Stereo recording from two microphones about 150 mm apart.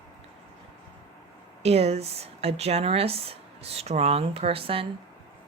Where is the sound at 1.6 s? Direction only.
45° right (ahead or behind).